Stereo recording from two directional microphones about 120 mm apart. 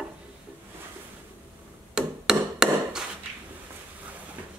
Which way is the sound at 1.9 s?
5° right (ahead or behind).